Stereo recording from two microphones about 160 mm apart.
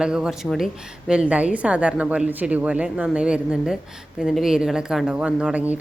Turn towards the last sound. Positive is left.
turn(degrees=-10)  # may be behind; listen again after turning